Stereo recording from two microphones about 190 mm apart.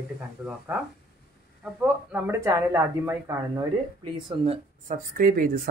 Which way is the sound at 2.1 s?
10° right (ahead or behind).